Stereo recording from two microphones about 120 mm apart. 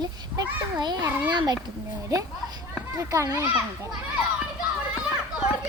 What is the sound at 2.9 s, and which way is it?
Speech, 25° right (ahead or behind).